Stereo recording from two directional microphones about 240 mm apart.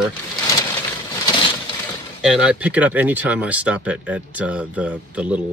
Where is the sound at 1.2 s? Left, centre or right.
Centre.